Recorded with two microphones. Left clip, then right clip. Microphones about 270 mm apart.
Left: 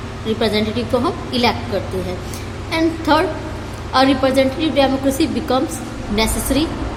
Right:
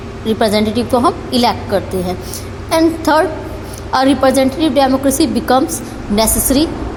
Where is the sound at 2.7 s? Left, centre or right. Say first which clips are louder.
Right 4 dB; right.